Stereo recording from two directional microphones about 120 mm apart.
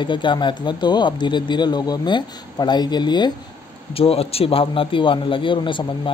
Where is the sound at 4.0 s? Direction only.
55° left (ahead or behind).